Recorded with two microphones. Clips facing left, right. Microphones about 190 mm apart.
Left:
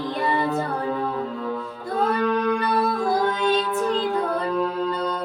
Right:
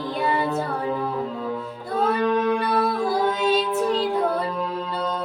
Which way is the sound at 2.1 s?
20° right (ahead or behind).